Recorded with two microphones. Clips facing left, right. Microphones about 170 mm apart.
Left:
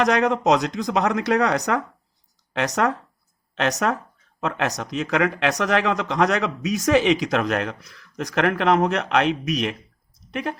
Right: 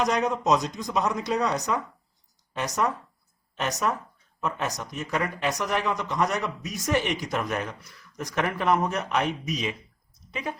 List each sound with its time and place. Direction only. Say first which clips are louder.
0.0 s speech: left 5 dB; 70° left (ahead or behind)
2.5 s speech: left 5 dB; 85° left